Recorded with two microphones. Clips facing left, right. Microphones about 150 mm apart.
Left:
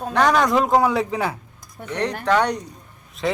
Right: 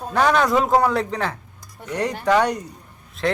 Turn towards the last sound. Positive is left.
turn(degrees=0)  # may be behind; listen again after turning